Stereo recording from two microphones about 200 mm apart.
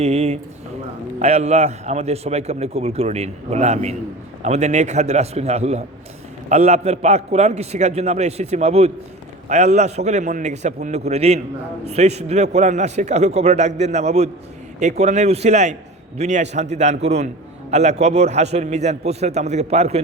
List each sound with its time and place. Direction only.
0.0 s a man's voice: 30° right (ahead or behind)